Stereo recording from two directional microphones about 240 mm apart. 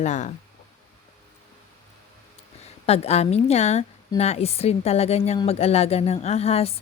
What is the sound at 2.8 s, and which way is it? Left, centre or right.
Speech, left.